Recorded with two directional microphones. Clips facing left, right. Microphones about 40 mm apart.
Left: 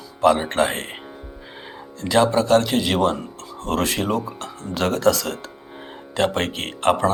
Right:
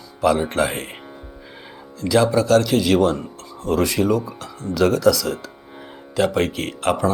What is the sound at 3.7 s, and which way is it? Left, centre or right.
Speech, left.